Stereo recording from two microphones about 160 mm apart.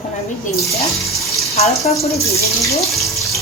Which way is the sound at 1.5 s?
40° left (ahead or behind).